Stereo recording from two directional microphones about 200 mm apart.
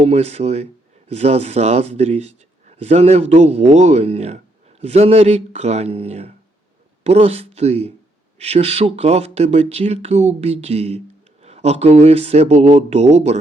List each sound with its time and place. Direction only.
0.0 s speech: 35° right (ahead or behind)